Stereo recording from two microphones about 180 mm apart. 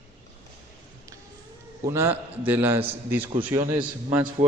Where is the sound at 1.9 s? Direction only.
15° right (ahead or behind).